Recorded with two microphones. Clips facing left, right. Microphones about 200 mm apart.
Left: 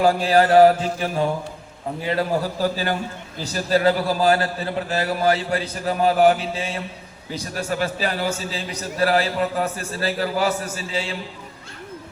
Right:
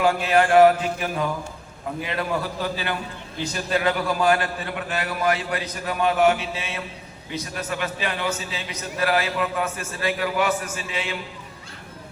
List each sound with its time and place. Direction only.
0.0 s a man's voice: 35° left (ahead or behind)